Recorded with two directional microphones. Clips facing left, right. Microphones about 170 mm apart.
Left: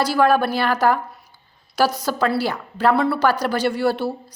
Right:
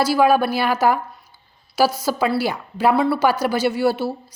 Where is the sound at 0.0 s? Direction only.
10° right (ahead or behind).